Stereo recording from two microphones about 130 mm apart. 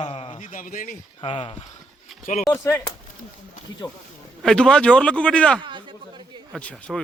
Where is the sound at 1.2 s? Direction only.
45° left (ahead or behind).